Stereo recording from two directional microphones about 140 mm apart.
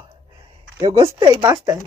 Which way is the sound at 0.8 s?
45° right (ahead or behind).